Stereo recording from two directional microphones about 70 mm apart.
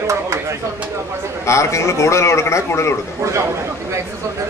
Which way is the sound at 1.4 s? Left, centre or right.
Left.